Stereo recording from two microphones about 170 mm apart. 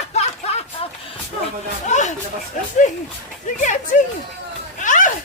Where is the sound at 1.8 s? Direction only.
45° left (ahead or behind).